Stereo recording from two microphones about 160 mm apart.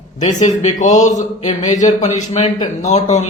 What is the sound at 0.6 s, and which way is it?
Speech, 50° left (ahead or behind).